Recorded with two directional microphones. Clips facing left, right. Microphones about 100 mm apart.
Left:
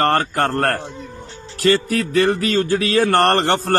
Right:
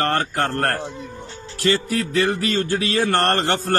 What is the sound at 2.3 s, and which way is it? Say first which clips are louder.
Speech: left 4 dB; 50° left (ahead or behind).